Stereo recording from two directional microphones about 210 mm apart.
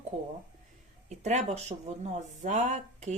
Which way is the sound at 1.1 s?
35° right (ahead or behind).